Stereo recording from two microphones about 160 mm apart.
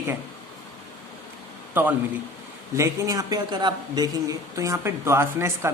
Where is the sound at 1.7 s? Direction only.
10° right (ahead or behind).